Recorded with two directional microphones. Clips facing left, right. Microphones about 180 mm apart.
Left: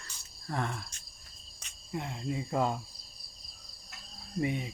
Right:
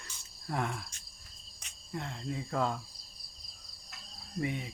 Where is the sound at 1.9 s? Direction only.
10° left (ahead or behind).